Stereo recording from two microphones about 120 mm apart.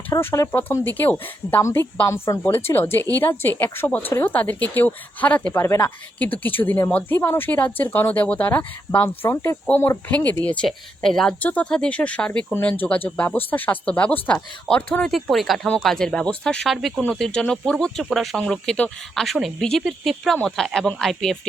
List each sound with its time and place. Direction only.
0.1 s a woman's voice: 25° left (ahead or behind)
15.1 s speech: centre (ahead or behind)